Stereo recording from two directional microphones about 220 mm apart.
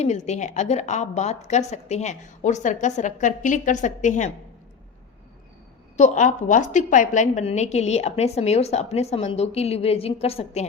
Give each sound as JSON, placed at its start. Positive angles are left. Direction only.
{"t": 0.0, "sound": "a woman's voice", "side_deg": 30}
{"t": 6.0, "sound": "a woman's voice", "side_deg": 35}